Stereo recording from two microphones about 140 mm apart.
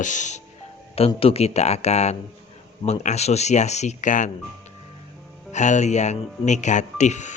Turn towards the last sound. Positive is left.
turn(degrees=55)  # may be behind; listen again after turning